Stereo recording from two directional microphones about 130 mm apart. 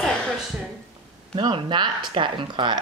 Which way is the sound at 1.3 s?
40° right (ahead or behind).